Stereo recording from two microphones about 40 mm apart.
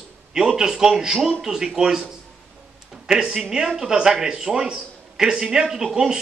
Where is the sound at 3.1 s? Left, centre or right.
Centre.